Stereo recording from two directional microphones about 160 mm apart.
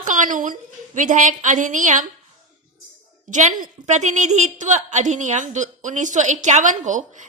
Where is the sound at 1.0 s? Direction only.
55° right (ahead or behind).